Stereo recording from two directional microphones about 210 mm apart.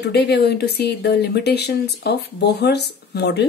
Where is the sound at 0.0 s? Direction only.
50° left (ahead or behind).